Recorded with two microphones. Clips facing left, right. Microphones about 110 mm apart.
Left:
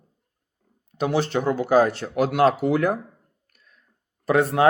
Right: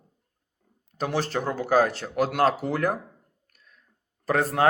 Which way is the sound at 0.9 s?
40° right (ahead or behind).